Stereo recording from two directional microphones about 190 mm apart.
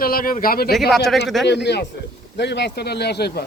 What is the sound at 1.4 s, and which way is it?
Speech, 65° left (ahead or behind).